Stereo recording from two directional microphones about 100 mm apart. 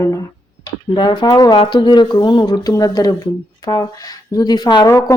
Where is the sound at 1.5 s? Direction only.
55° left (ahead or behind).